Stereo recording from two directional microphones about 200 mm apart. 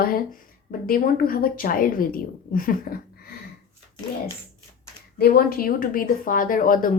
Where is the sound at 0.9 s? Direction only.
45° left (ahead or behind).